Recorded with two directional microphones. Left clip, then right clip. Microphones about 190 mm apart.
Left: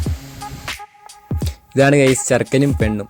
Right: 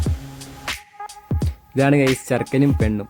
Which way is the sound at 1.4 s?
10° left (ahead or behind).